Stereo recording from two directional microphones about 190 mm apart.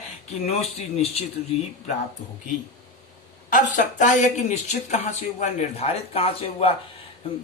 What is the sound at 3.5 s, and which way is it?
Speech, 45° left (ahead or behind).